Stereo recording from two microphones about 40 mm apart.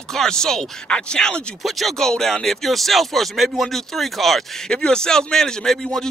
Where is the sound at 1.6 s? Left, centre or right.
Centre.